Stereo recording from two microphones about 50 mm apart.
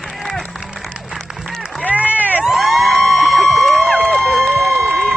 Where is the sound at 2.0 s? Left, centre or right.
Left.